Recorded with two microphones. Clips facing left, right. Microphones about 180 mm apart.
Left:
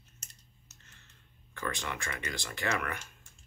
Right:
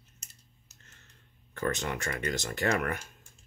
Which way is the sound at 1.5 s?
45° right (ahead or behind).